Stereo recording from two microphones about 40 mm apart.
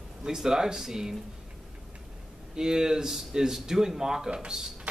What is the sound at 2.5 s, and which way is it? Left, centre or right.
Speech, centre.